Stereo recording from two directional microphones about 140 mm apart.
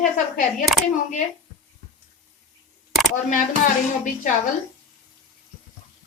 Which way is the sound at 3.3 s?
70° left (ahead or behind).